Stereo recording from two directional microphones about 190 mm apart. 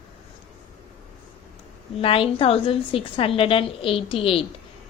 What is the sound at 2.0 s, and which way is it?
A woman's voice, 30° left (ahead or behind).